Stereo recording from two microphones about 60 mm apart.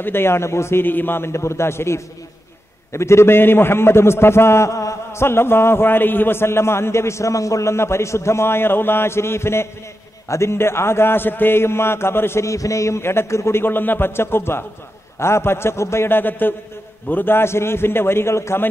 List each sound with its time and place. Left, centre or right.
0.0 s a man's voice: left
5.2 s a man's voice: left
12.4 s a man's voice: left